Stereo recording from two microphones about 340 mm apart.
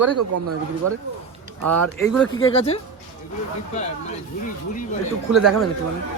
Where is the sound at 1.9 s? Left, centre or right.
Centre.